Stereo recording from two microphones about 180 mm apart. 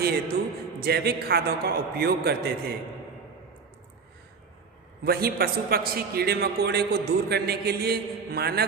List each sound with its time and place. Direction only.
0.0 s a man's voice: 60° right (ahead or behind)
5.0 s a man's voice: 55° right (ahead or behind)